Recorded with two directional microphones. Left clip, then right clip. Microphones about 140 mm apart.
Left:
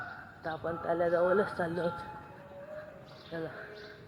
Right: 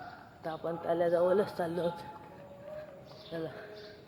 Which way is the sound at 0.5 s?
15° right (ahead or behind).